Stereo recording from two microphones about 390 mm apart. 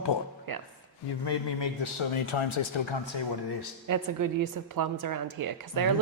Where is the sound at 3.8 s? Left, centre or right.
Right.